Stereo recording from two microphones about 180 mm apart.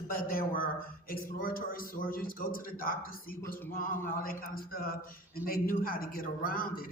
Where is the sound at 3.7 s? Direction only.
50° left (ahead or behind).